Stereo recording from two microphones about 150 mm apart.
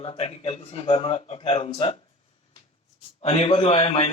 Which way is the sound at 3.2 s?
45° left (ahead or behind).